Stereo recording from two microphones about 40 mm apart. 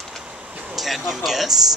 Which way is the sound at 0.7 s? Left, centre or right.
Centre.